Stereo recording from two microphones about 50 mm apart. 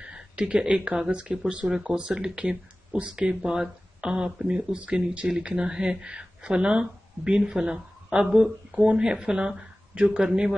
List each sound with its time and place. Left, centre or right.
0.0 s speech: centre